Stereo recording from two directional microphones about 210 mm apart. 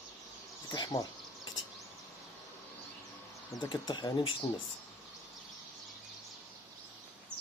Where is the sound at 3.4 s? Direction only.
15° left (ahead or behind).